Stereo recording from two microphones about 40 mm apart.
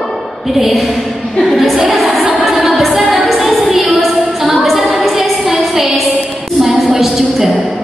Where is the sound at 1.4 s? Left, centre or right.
Centre.